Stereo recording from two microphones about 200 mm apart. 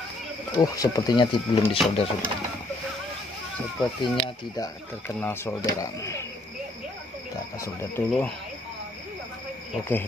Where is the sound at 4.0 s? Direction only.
20° left (ahead or behind).